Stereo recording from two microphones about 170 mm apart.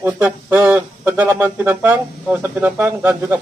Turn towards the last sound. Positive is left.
turn(degrees=-10)  # may be behind; listen again after turning